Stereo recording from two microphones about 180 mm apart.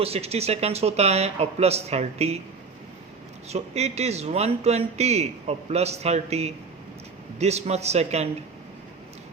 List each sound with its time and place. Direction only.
0.0 s a man's voice: 35° right (ahead or behind)
3.5 s a man's voice: 35° right (ahead or behind)